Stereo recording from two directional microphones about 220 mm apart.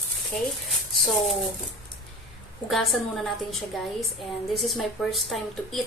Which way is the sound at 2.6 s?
Centre (ahead or behind).